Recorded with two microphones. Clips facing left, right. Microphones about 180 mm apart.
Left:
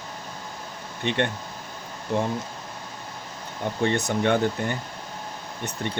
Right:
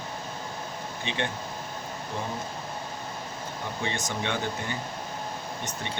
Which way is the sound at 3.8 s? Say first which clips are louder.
Left 9 dB; 60° left (ahead or behind).